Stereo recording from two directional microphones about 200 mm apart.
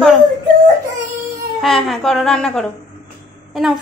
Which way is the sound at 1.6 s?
Centre (ahead or behind).